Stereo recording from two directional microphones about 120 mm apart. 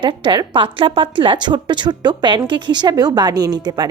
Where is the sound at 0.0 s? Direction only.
40° right (ahead or behind).